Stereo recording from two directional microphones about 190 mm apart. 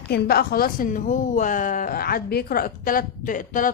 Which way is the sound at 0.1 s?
55° left (ahead or behind).